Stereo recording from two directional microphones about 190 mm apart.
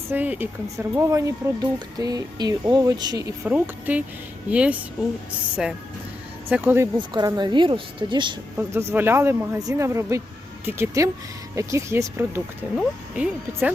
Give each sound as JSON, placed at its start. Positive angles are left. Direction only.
{"t": 0.1, "sound": "speech", "side_deg": -10}
{"t": 6.9, "sound": "speech", "side_deg": -25}
{"t": 8.5, "sound": "speech", "side_deg": -15}